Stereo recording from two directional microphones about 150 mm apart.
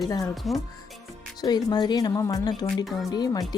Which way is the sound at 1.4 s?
25° left (ahead or behind).